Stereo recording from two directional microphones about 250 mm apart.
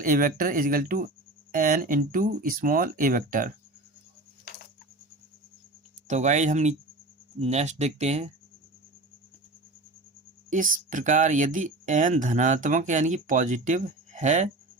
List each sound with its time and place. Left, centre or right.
0.0 s speech: right
6.1 s speech: right
10.5 s speech: right